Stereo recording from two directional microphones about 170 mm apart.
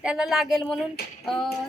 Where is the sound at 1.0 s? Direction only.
65° left (ahead or behind).